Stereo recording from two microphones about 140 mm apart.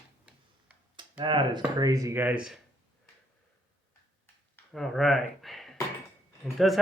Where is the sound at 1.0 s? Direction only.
35° right (ahead or behind).